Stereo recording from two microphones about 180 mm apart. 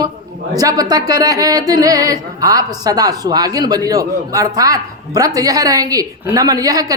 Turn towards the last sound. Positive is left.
turn(degrees=-20)  # may be behind; listen again after turning